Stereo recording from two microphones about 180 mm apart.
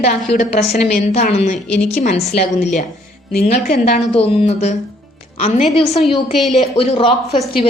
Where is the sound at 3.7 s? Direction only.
55° left (ahead or behind).